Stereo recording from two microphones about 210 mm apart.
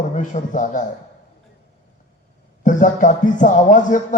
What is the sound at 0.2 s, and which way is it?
Speech, 35° left (ahead or behind).